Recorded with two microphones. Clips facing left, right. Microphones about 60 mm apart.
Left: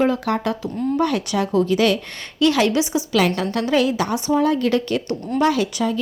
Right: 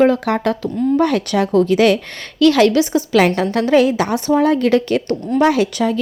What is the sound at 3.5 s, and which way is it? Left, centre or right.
Speech, centre.